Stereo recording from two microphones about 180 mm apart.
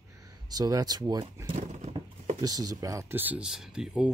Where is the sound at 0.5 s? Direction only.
20° right (ahead or behind).